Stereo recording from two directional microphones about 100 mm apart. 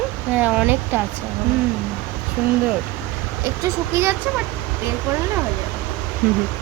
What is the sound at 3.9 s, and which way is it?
Speech, 25° right (ahead or behind).